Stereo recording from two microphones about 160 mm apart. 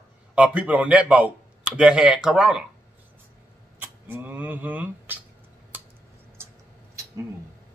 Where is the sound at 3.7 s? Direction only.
10° right (ahead or behind).